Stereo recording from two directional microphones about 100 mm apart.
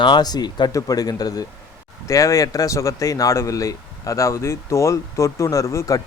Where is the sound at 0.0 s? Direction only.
45° left (ahead or behind).